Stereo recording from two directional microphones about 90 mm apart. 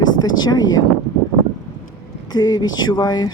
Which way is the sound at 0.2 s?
50° left (ahead or behind).